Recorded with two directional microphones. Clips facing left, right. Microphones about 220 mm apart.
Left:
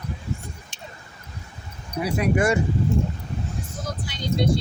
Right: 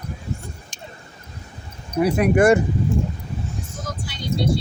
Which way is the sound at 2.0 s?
55° right (ahead or behind).